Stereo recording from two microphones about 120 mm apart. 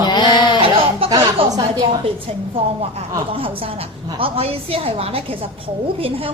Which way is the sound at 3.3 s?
50° right (ahead or behind).